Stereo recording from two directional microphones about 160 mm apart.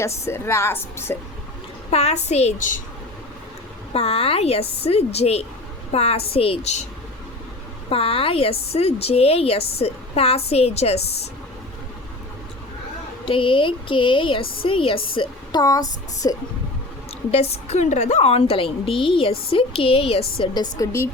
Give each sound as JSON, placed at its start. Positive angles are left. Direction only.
{"t": 0.0, "sound": "a woman's voice", "side_deg": 15}
{"t": 1.9, "sound": "a child's voice", "side_deg": 40}
{"t": 3.9, "sound": "a woman's voice", "side_deg": 40}
{"t": 7.9, "sound": "a woman's voice", "side_deg": 35}
{"t": 13.2, "sound": "a woman's voice", "side_deg": 35}
{"t": 15.6, "sound": "a sound", "side_deg": 20}
{"t": 17.3, "sound": "a woman's voice", "side_deg": 40}
{"t": 20.4, "sound": "a sound", "side_deg": 25}